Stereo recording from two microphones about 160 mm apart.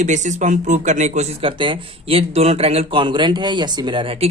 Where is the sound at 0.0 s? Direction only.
50° right (ahead or behind).